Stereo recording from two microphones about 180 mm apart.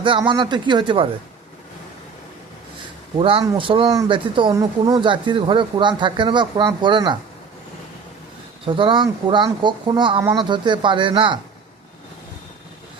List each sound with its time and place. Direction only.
0.0 s speech: 25° right (ahead or behind)
3.2 s speech: 30° right (ahead or behind)
8.6 s speech: 30° right (ahead or behind)